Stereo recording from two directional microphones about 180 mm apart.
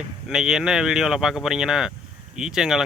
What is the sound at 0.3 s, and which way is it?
Speech, 5° right (ahead or behind).